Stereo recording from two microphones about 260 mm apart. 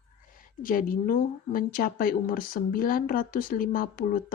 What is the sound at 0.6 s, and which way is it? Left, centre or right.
Speech, left.